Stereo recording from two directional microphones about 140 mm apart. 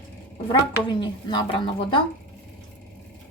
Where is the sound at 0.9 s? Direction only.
35° left (ahead or behind).